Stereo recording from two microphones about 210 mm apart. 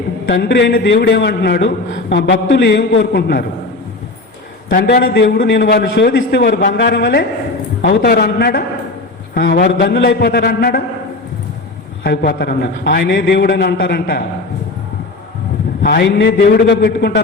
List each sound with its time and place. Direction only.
0.3 s a man's voice: 60° left (ahead or behind); by 3.4 s 45° left (ahead or behind)
4.7 s a man's voice: 45° left (ahead or behind)
12.0 s a man's voice: 55° left (ahead or behind)
15.8 s a man's voice: 55° left (ahead or behind)